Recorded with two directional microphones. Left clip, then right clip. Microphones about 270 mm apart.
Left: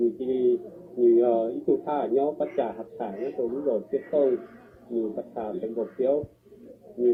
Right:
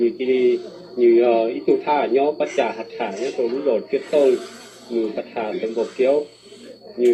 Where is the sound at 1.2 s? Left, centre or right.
Right.